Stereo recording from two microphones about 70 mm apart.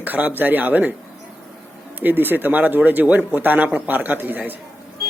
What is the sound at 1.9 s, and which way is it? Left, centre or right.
Speech, right.